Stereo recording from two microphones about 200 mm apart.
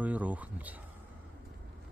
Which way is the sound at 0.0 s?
5° right (ahead or behind).